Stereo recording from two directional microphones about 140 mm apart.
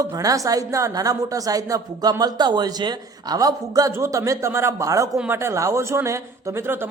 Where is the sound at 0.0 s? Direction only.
25° right (ahead or behind).